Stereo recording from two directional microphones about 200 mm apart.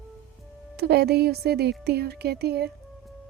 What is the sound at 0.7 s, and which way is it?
Speech, 55° right (ahead or behind).